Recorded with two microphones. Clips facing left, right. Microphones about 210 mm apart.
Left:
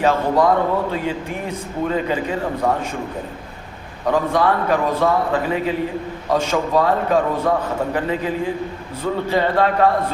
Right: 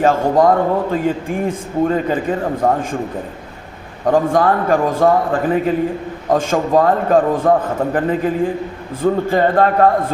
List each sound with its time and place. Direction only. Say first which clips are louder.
0.0 s speech: right 3 dB; 45° right (ahead or behind)
4.0 s speech: right 4 dB; 45° right (ahead or behind)